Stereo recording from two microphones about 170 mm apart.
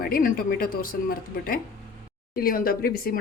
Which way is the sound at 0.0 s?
60° left (ahead or behind).